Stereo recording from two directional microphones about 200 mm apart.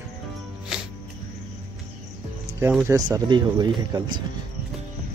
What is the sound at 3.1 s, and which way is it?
Speech, 20° right (ahead or behind).